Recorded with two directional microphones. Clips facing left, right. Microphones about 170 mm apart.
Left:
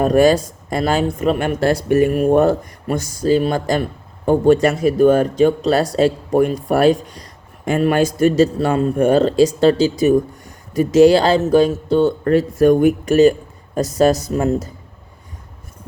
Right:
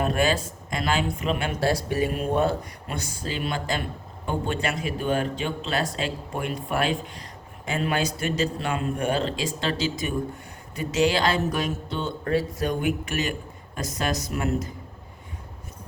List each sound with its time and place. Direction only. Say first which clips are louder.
0.0 s speech: left 11 dB; 40° left (ahead or behind)
11.9 s speech: left 12 dB; 50° left (ahead or behind); by 14.6 s 35° left (ahead or behind)